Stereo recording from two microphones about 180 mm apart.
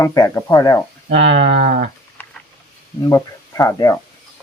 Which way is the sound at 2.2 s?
10° left (ahead or behind).